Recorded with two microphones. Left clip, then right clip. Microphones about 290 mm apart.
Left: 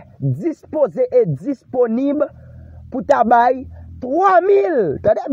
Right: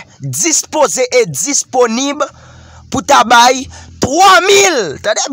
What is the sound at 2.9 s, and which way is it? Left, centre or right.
Speech, right.